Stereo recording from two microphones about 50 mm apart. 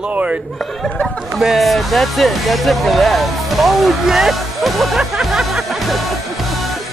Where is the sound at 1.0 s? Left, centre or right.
Centre.